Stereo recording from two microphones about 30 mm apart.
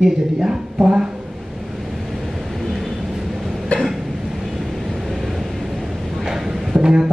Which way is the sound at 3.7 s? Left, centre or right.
Left.